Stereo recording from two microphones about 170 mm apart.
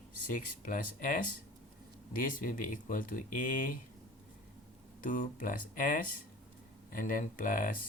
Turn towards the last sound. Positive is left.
turn(degrees=55)  # may be behind; listen again after turning